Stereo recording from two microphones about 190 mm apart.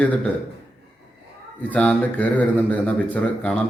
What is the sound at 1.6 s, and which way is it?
Speech, 5° left (ahead or behind).